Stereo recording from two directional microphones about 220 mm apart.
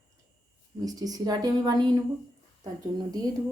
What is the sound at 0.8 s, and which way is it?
A woman's voice, 15° right (ahead or behind).